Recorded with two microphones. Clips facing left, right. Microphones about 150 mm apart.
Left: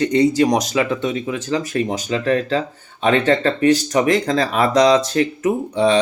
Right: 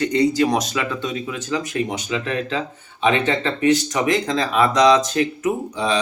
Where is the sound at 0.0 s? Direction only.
20° left (ahead or behind).